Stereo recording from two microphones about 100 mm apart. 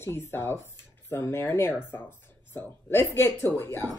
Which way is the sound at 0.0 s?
25° left (ahead or behind).